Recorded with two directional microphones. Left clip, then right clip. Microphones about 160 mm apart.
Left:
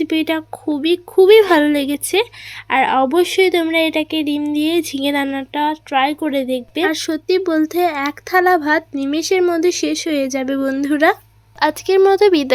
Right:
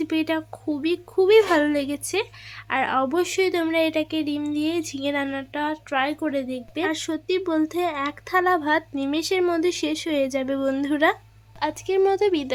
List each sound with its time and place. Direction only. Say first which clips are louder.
0.0 s a woman's voice: left 6 dB; 20° left (ahead or behind)